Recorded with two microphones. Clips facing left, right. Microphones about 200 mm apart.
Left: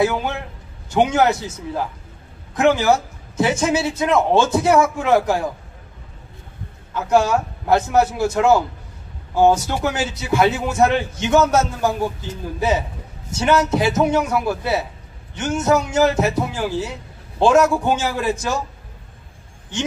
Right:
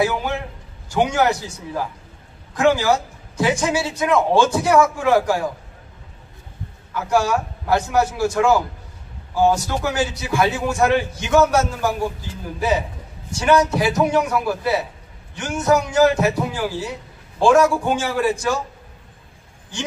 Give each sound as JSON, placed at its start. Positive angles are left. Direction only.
{"t": 0.8, "sound": "a man's voice", "side_deg": 20}
{"t": 6.9, "sound": "a man's voice", "side_deg": 20}
{"t": 17.4, "sound": "a man's voice", "side_deg": 20}
{"t": 19.7, "sound": "a man's voice", "side_deg": 20}